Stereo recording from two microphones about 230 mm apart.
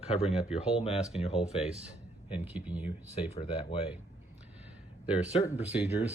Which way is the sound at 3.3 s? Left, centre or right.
Left.